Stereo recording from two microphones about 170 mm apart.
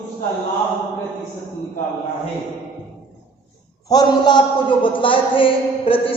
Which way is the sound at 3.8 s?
25° left (ahead or behind).